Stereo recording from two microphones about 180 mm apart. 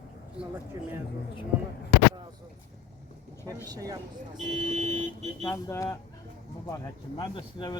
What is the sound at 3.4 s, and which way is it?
Speech, 20° right (ahead or behind).